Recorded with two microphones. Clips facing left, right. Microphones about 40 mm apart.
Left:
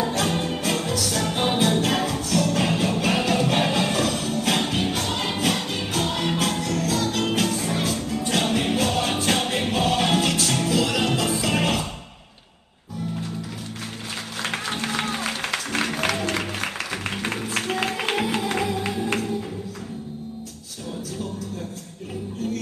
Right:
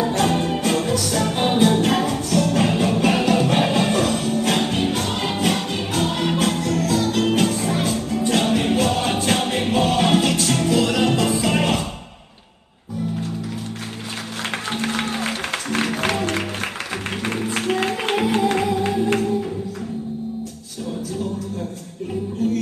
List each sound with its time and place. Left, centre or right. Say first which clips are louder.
0.0 s music: right 4 dB; centre
14.9 s music: right 2 dB; centre
17.2 s music: right 5 dB; centre